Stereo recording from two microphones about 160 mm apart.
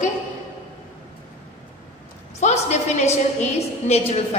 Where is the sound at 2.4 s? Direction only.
45° left (ahead or behind).